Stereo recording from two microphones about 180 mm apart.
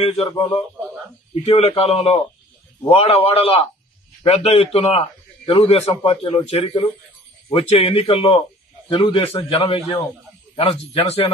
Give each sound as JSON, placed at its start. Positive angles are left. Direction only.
{"t": 0.0, "sound": "a man's voice", "side_deg": 35}